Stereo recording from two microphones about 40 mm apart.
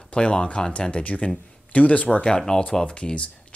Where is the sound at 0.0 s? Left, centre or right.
Left.